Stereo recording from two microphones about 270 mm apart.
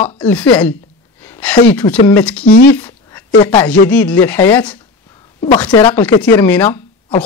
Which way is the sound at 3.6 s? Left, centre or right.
Centre.